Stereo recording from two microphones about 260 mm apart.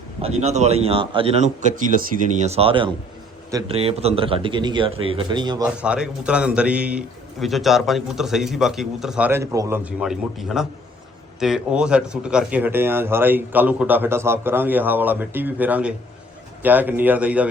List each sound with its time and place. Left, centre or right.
0.2 s a man's voice: right
5.8 s a man's voice: centre